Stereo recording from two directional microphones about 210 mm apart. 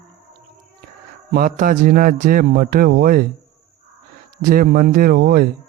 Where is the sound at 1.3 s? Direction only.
45° right (ahead or behind).